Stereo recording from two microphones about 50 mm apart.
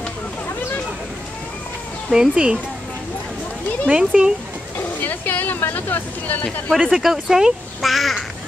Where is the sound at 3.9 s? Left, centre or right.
Centre.